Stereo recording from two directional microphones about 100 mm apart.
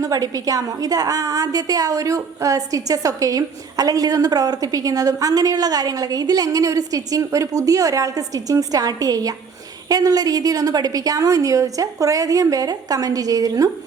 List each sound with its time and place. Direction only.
0.0 s a woman's voice: 35° right (ahead or behind)